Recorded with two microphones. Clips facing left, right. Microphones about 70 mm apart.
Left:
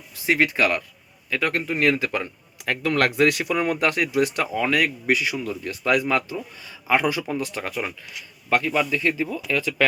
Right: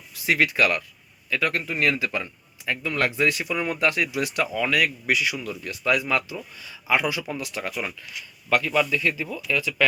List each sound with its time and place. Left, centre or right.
0.3 s speech: left
2.6 s speech: left